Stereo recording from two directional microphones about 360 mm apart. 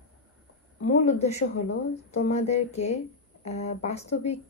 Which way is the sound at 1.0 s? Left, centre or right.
Centre.